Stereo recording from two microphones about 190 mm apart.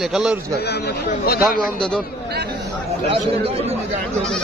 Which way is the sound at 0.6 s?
60° left (ahead or behind).